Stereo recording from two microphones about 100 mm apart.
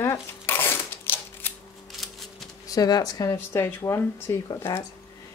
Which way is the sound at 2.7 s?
40° left (ahead or behind).